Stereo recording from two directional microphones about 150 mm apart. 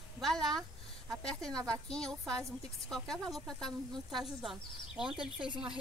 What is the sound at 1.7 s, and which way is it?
Speech, 5° left (ahead or behind).